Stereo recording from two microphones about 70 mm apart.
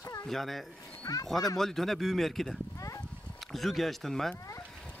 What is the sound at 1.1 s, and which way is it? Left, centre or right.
Speech, left.